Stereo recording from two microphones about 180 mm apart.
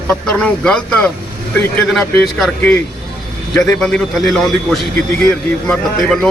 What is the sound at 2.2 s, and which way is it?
Speech, centre (ahead or behind).